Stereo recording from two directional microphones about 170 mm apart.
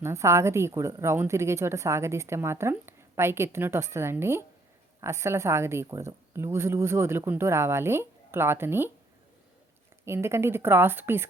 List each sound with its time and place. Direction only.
0.0 s a woman's voice: 15° right (ahead or behind)
10.1 s a woman's voice: 15° right (ahead or behind)